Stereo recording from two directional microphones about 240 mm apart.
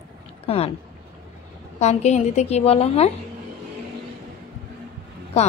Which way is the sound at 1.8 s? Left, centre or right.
Left.